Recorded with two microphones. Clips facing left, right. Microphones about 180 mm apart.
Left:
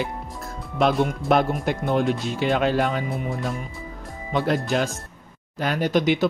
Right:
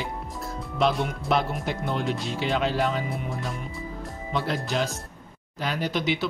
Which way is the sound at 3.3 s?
Centre (ahead or behind).